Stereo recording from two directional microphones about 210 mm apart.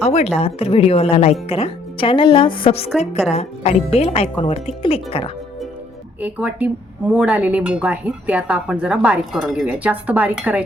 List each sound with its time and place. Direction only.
0.0 s speech: 30° left (ahead or behind)
6.1 s speech: 5° right (ahead or behind)